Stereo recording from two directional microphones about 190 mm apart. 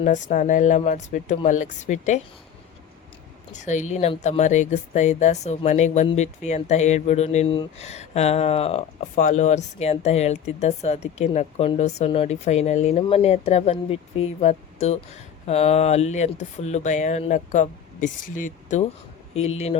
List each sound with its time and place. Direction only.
0.0 s speech: 40° left (ahead or behind)
3.5 s speech: 40° left (ahead or behind)
9.1 s speech: 40° left (ahead or behind)